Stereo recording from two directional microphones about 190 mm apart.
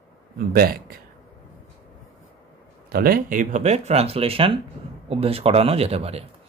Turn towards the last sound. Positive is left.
turn(degrees=-35)  # may be behind; listen again after turning